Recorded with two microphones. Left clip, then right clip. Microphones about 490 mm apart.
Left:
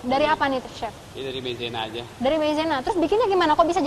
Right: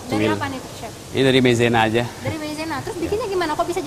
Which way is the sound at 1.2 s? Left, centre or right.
Right.